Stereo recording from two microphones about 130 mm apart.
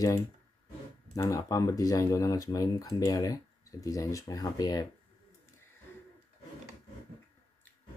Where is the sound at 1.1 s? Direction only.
25° left (ahead or behind).